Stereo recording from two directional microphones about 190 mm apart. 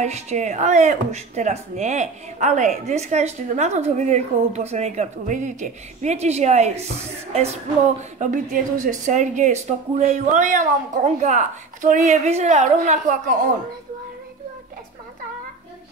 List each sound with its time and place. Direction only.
0.0 s speech: 35° right (ahead or behind)